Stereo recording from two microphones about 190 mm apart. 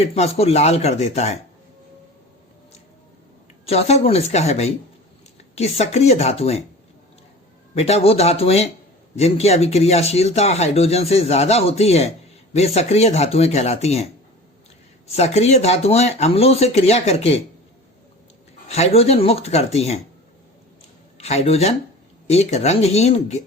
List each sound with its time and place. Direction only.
0.0 s speech: 35° left (ahead or behind)
3.7 s speech: 35° left (ahead or behind)
7.8 s speech: 35° left (ahead or behind)
15.1 s speech: 35° left (ahead or behind)
18.7 s speech: 35° left (ahead or behind)
21.2 s speech: 35° left (ahead or behind)